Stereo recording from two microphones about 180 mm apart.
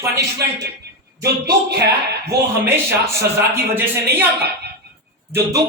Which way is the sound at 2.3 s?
10° right (ahead or behind).